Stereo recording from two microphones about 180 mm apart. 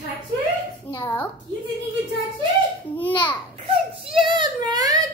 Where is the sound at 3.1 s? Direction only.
25° left (ahead or behind).